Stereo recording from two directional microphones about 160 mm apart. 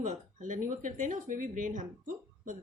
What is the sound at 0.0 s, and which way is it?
Speech, 50° right (ahead or behind).